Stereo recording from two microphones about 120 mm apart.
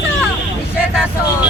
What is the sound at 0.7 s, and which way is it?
Vehicle, 10° right (ahead or behind).